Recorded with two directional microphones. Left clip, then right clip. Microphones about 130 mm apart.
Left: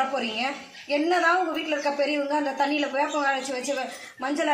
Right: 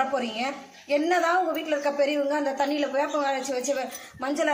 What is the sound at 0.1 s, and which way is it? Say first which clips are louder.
Speech: left 1 dB; 10° right (ahead or behind).